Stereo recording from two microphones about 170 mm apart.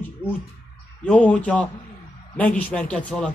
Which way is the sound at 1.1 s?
10° left (ahead or behind).